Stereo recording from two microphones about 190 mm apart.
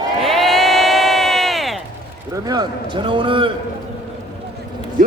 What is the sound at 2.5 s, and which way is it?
A man's voice, 25° right (ahead or behind).